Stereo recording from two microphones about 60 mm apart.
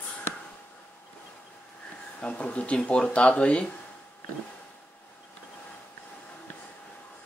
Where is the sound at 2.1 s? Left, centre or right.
Centre.